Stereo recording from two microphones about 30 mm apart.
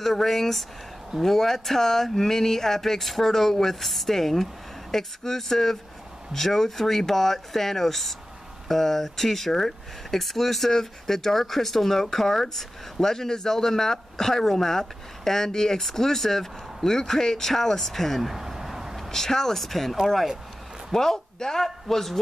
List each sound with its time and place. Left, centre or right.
0.0 s speech: centre
18.2 s a sound: centre
19.0 s speech: centre
19.5 s speech: centre